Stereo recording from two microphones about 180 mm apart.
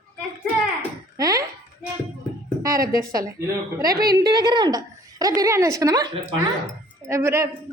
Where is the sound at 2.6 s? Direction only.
20° right (ahead or behind).